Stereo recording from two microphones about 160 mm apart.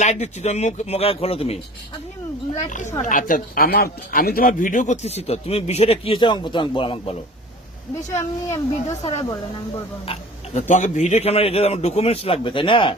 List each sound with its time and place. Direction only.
0.0 s speech: 45° left (ahead or behind)
2.6 s speech: 50° left (ahead or behind); by 7.0 s 30° left (ahead or behind)
8.1 s speech: 15° left (ahead or behind)
10.1 s speech: 45° left (ahead or behind)